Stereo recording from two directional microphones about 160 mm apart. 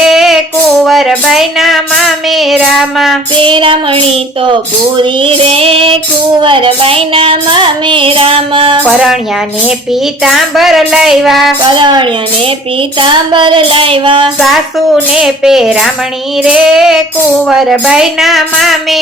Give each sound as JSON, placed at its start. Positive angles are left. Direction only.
{"t": 0.0, "sound": "female singing", "side_deg": -5}
{"t": 0.9, "sound": "child singing", "side_deg": 0}
{"t": 3.4, "sound": "child singing", "side_deg": -30}
{"t": 5.2, "sound": "child singing", "side_deg": -35}
{"t": 8.9, "sound": "a woman's voice", "side_deg": -5}
{"t": 11.6, "sound": "a woman's voice", "side_deg": -30}
{"t": 13.0, "sound": "child singing", "side_deg": -30}
{"t": 14.3, "sound": "a woman's voice", "side_deg": 0}